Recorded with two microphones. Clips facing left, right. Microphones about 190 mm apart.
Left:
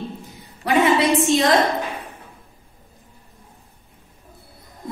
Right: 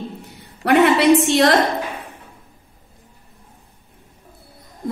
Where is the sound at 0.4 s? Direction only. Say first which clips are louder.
Right 4 dB; 65° right (ahead or behind).